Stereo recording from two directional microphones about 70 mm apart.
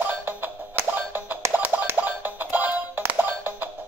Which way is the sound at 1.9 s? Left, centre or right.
Right.